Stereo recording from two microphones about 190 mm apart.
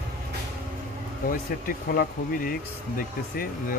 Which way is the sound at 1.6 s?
50° left (ahead or behind).